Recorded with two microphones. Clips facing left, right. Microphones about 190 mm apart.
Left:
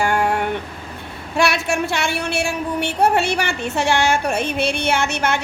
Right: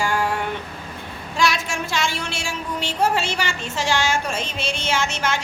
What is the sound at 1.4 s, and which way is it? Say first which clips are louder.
A woman's voice: left 4 dB; 65° left (ahead or behind).